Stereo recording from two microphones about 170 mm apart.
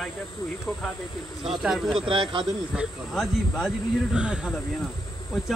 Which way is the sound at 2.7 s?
Centre (ahead or behind).